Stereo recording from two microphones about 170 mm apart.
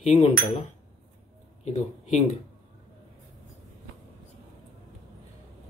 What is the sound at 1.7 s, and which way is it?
Speech, 45° left (ahead or behind).